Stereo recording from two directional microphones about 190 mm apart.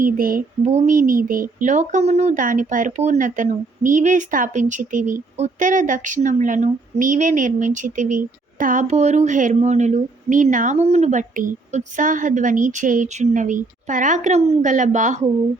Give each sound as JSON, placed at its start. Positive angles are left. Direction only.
{"t": 0.0, "sound": "a woman's voice", "side_deg": -50}